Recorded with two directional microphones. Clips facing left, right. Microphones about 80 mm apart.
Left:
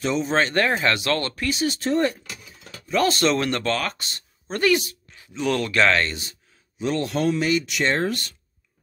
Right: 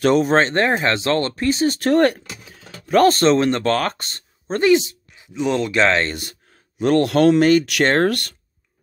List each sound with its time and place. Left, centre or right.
0.0 s speech: right
0.3 s speech: right
1.8 s speech: right
2.9 s speech: right
3.6 s speech: right
4.6 s speech: right
6.8 s speech: right
7.4 s speech: right